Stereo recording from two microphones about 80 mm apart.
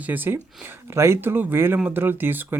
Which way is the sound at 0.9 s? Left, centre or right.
Right.